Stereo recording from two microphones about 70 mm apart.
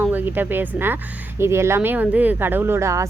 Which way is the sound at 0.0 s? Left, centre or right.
Right.